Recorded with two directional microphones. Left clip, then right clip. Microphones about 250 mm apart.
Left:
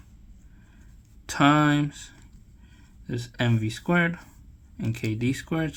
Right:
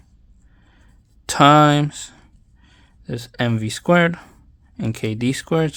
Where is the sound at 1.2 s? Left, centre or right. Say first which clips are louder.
Right 9 dB; right.